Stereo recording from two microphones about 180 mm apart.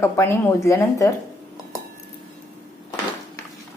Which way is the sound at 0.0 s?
15° left (ahead or behind).